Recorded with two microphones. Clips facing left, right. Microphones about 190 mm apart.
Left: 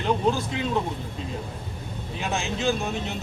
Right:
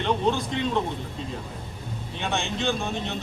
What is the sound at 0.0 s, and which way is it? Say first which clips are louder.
Speech: left 1 dB; centre (ahead or behind).